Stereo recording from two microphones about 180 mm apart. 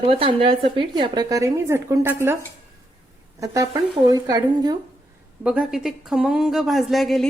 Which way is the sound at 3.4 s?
20° right (ahead or behind).